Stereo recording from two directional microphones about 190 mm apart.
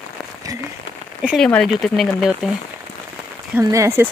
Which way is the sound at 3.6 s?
15° right (ahead or behind).